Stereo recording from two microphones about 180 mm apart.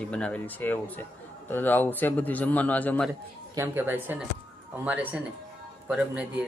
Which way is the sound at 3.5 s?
10° right (ahead or behind).